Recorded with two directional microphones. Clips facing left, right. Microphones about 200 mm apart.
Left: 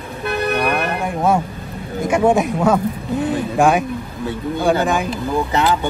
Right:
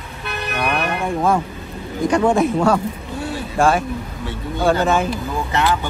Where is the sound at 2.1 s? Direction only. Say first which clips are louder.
Left 1 dB; 20° left (ahead or behind).